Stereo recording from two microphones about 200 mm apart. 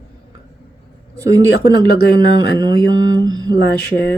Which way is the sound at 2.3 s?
20° right (ahead or behind).